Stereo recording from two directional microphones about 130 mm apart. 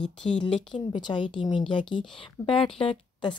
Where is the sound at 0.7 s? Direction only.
40° left (ahead or behind).